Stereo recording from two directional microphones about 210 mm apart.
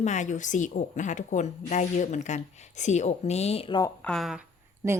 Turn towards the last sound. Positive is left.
turn(degrees=-15)  # may be behind; listen again after turning